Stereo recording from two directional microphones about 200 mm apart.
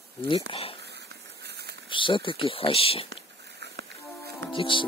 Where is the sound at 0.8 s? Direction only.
60° right (ahead or behind).